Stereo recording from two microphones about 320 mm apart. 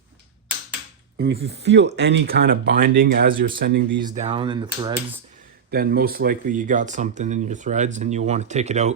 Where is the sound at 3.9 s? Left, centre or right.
Centre.